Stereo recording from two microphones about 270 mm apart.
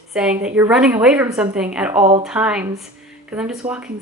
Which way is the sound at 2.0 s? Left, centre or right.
Right.